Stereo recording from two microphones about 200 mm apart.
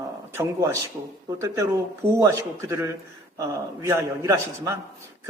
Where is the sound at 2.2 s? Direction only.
15° right (ahead or behind).